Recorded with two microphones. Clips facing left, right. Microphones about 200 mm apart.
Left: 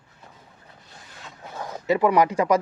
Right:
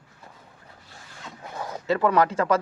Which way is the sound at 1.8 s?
15° left (ahead or behind).